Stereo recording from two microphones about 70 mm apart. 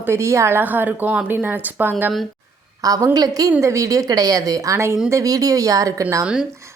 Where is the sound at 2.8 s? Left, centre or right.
Right.